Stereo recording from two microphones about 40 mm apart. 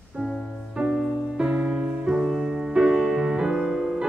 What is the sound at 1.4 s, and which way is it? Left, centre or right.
Music, right.